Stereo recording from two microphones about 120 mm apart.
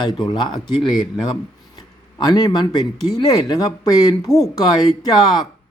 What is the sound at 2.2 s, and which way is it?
Speech, 35° left (ahead or behind).